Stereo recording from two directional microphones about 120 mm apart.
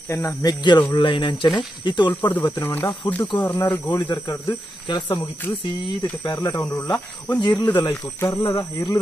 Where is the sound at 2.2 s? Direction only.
15° left (ahead or behind).